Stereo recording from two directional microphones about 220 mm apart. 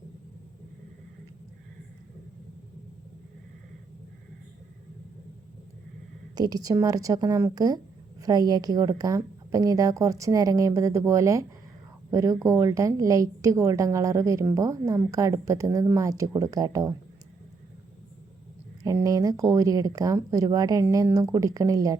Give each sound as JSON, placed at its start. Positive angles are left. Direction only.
{"t": 6.3, "sound": "a woman's voice", "side_deg": -15}
{"t": 18.8, "sound": "a woman's voice", "side_deg": -15}